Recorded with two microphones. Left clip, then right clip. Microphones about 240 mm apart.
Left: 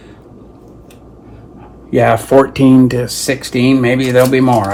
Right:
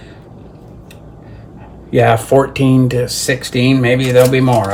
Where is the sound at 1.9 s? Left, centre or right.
Left.